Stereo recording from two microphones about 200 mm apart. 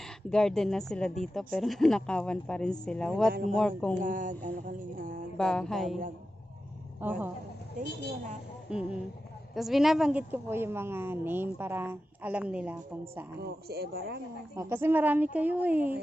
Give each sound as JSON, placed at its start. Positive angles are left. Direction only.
{"t": 0.3, "sound": "speech", "side_deg": 5}
{"t": 4.0, "sound": "a sound", "side_deg": -40}
{"t": 5.4, "sound": "speech", "side_deg": 5}
{"t": 7.0, "sound": "a woman's voice", "side_deg": -10}
{"t": 8.7, "sound": "a woman's voice", "side_deg": -5}
{"t": 13.7, "sound": "speech", "side_deg": -50}
{"t": 14.5, "sound": "a woman's voice", "side_deg": -15}